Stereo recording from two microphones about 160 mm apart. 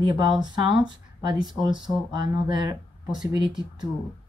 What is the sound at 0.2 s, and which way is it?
Speech, 30° right (ahead or behind).